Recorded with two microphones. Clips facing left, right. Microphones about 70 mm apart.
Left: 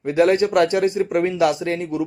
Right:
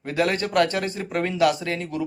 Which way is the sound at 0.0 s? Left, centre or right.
Left.